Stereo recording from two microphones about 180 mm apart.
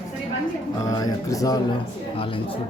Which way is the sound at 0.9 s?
20° left (ahead or behind).